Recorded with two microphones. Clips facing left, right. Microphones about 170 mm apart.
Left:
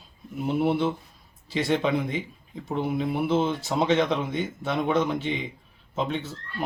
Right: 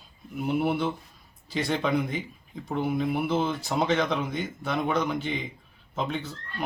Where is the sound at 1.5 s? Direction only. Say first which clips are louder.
Left 2 dB; centre (ahead or behind).